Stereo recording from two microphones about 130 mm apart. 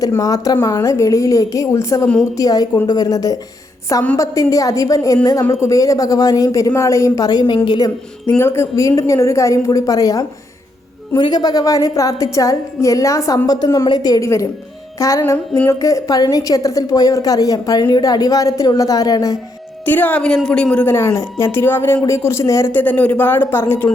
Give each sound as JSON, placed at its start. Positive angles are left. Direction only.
{"t": 0.0, "sound": "a woman's voice", "side_deg": 25}
{"t": 8.3, "sound": "a woman's voice", "side_deg": 20}
{"t": 14.9, "sound": "music", "side_deg": 25}
{"t": 15.2, "sound": "a woman's voice", "side_deg": 15}
{"t": 19.8, "sound": "a woman's voice", "side_deg": 15}